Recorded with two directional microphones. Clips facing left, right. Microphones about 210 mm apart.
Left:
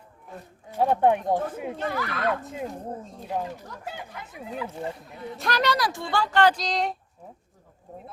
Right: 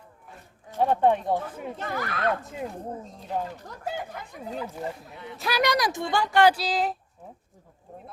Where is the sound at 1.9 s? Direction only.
45° right (ahead or behind).